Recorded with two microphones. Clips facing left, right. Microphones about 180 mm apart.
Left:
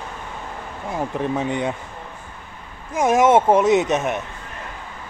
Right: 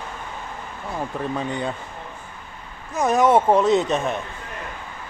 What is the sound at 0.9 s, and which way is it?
Speech, 15° left (ahead or behind).